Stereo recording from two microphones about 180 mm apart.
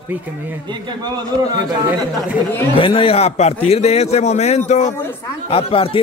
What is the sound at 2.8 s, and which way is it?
Speech, 30° left (ahead or behind).